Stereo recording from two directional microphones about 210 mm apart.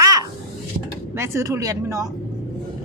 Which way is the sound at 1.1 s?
15° right (ahead or behind).